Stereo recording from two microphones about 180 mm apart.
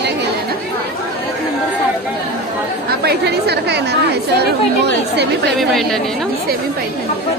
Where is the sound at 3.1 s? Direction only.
65° right (ahead or behind).